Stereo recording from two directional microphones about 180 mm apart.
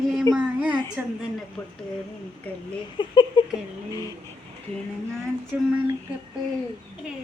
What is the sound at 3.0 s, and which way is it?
Speech, 25° left (ahead or behind).